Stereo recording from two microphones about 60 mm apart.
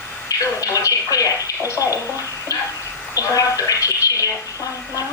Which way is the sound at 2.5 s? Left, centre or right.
Left.